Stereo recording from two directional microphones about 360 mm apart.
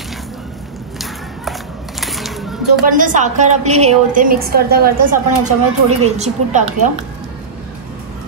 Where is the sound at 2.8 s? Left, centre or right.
Right.